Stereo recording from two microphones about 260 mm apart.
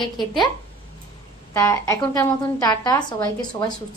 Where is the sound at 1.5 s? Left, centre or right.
Centre.